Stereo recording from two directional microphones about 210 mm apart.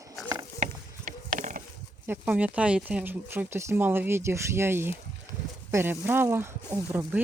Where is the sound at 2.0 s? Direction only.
5° right (ahead or behind).